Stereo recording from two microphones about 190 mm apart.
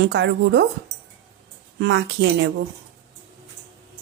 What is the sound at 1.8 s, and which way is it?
Speech, 70° right (ahead or behind).